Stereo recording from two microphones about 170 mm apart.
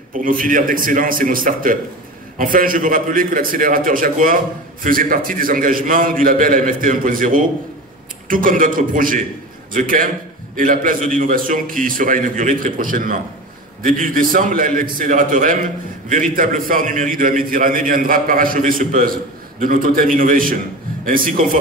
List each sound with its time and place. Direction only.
0.1 s a man's voice: 55° right (ahead or behind)